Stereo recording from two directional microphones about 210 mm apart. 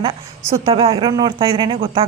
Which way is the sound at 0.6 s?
25° right (ahead or behind).